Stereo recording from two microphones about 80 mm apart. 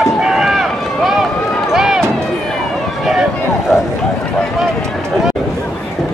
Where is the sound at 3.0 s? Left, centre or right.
Centre.